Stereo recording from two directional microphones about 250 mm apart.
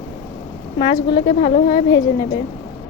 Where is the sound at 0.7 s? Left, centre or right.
Left.